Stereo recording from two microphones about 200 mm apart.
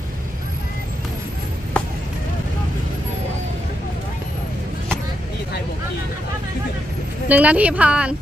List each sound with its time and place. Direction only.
1.8 s vehicle: 5° left (ahead or behind)
7.2 s speech: 5° right (ahead or behind)